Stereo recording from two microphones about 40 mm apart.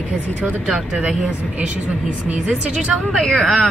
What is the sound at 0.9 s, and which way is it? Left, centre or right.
Speech, right.